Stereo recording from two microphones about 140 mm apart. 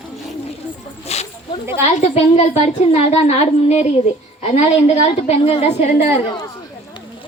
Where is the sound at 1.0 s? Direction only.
50° left (ahead or behind).